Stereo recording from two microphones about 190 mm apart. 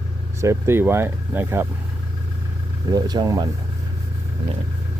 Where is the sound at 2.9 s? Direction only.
20° right (ahead or behind).